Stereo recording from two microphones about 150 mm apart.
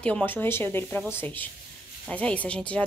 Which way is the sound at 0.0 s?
10° left (ahead or behind).